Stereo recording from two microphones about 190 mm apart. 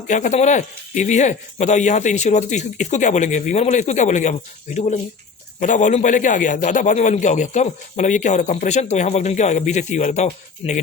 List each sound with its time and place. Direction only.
0.1 s a man's voice: 40° left (ahead or behind)